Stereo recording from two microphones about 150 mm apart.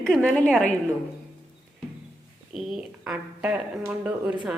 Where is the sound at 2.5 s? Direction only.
5° right (ahead or behind).